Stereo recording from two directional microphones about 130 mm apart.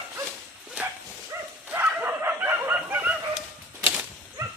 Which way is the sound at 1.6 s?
15° right (ahead or behind).